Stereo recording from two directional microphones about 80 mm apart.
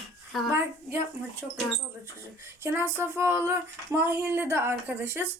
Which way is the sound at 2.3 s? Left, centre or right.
Right.